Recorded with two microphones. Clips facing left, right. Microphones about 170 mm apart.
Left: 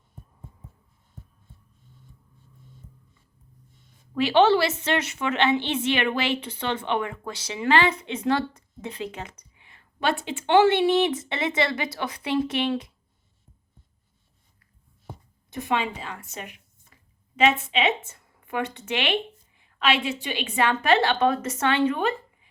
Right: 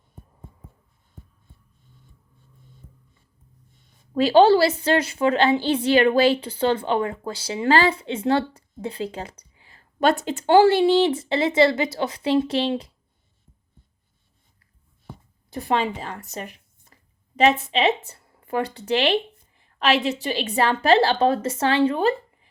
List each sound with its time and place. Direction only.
4.1 s a woman's voice: 35° right (ahead or behind)
15.4 s speech: 35° right (ahead or behind)